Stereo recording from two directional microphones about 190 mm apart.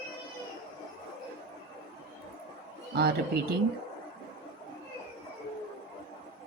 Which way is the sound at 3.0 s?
55° right (ahead or behind).